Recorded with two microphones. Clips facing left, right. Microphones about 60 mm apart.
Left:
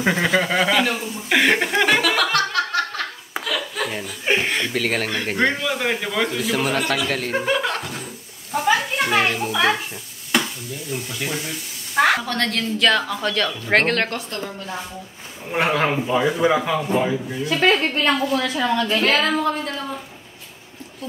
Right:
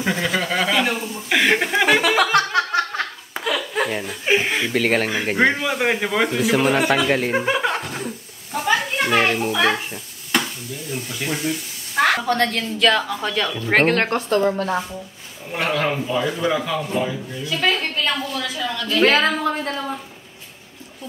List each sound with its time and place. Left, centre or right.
0.0 s a man's voice: left
0.6 s a sound: centre; by 3.1 s right
3.4 s laughter: right
4.3 s speech: centre
8.5 s children playing: centre
10.9 s speech: centre
12.2 s speech: centre
14.0 s a woman's voice: right
15.5 s a man's voice: left
17.5 s a woman's voice: left
17.7 s a woman's voice: left
18.9 s speech: right